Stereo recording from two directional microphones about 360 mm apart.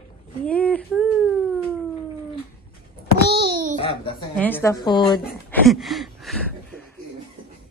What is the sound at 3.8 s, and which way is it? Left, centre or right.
A woman's voice, centre.